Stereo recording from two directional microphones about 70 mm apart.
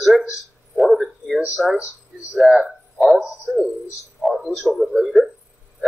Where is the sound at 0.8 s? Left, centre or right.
Centre.